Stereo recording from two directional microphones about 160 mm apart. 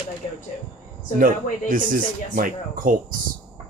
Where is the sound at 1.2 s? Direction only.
55° right (ahead or behind).